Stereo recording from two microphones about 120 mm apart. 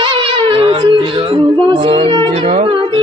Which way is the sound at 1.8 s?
45° right (ahead or behind).